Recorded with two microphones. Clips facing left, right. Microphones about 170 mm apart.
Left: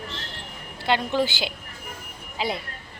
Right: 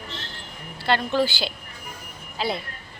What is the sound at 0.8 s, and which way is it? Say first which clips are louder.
Speech: right 1 dB; 15° left (ahead or behind).